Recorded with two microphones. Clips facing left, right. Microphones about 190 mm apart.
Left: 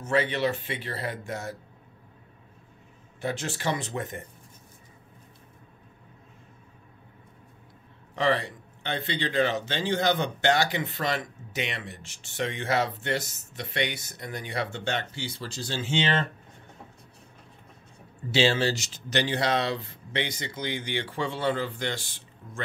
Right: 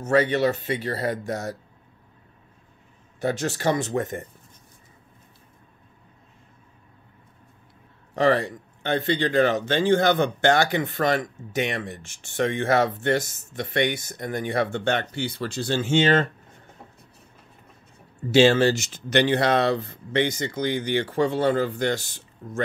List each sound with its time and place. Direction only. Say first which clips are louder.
0.0 s speech: right 5 dB; 45° right (ahead or behind)
3.2 s speech: right 6 dB; 40° right (ahead or behind)
8.2 s speech: right 5 dB; 45° right (ahead or behind)
18.3 s speech: right 7 dB; 50° right (ahead or behind)